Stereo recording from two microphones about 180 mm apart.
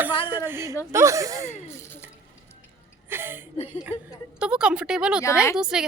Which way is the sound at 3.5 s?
40° left (ahead or behind).